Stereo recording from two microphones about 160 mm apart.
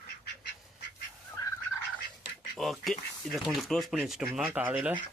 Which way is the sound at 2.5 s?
Centre (ahead or behind).